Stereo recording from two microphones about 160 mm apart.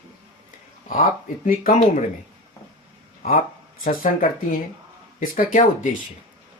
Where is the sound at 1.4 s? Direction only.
55° left (ahead or behind).